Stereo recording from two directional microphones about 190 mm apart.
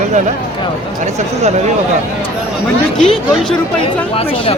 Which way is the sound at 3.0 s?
5° left (ahead or behind).